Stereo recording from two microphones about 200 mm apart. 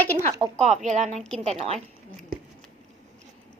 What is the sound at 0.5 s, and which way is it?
Speech, 35° right (ahead or behind).